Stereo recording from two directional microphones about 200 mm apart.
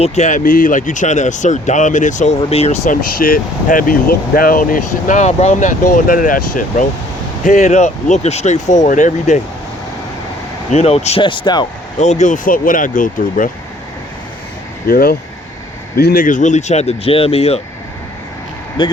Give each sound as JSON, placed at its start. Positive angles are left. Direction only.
{"t": 0.0, "sound": "speech", "side_deg": 35}
{"t": 10.7, "sound": "speech", "side_deg": 30}
{"t": 11.9, "sound": "speech", "side_deg": 35}
{"t": 14.8, "sound": "speech", "side_deg": 50}